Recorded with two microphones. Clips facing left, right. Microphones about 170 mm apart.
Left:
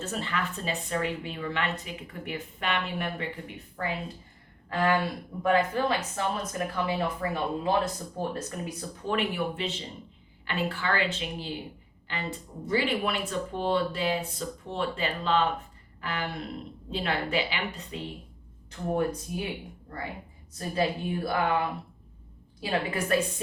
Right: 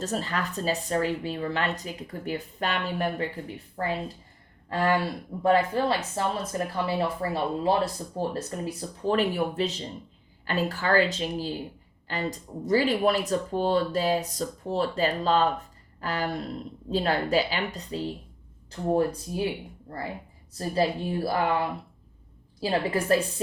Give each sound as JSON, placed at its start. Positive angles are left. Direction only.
{"t": 0.0, "sound": "speech", "side_deg": -40}
{"t": 20.5, "sound": "speech", "side_deg": -30}